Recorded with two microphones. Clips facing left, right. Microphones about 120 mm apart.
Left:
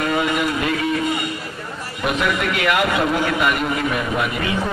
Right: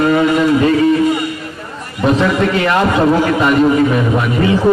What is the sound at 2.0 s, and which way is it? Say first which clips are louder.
A man's voice: right 8 dB; 30° right (ahead or behind).